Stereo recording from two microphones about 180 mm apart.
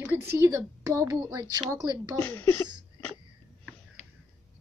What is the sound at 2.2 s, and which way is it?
Speech, 10° left (ahead or behind).